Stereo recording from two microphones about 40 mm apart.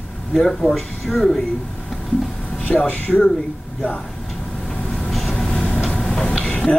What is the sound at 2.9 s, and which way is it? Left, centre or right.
Speech, left.